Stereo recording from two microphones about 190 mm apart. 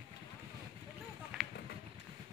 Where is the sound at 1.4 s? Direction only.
5° right (ahead or behind).